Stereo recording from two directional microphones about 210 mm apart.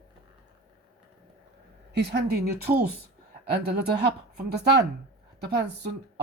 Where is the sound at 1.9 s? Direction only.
50° right (ahead or behind).